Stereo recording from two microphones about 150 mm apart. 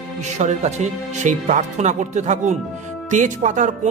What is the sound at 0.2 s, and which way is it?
Speech, 50° right (ahead or behind).